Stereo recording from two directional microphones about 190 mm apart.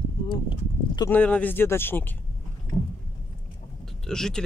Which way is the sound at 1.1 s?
10° left (ahead or behind).